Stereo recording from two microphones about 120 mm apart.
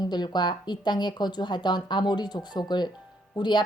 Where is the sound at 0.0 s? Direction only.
35° left (ahead or behind).